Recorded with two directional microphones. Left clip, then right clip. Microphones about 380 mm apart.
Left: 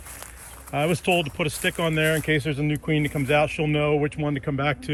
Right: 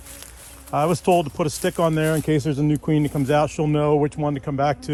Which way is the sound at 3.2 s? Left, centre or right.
Centre.